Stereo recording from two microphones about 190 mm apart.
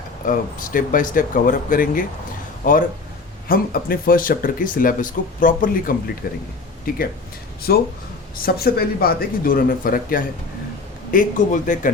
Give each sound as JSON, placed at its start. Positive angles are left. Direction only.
{"t": 0.3, "sound": "speech", "side_deg": 45}